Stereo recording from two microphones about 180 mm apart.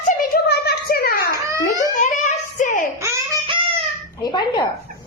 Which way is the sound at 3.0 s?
20° right (ahead or behind).